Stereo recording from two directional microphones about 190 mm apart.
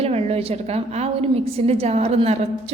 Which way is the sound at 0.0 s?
35° right (ahead or behind).